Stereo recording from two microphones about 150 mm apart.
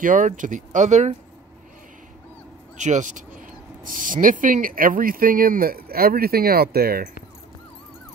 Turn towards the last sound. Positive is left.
turn(degrees=-90)